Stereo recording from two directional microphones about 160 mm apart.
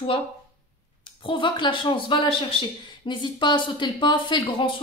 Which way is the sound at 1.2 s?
30° left (ahead or behind).